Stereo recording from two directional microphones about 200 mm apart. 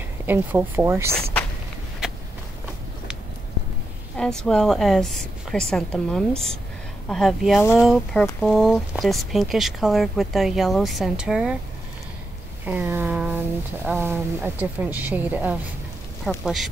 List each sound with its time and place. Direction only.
0.3 s a woman's voice: 10° right (ahead or behind)
4.2 s speech: 5° left (ahead or behind)
12.6 s a sound: 10° right (ahead or behind)
13.8 s a woman's voice: 10° right (ahead or behind)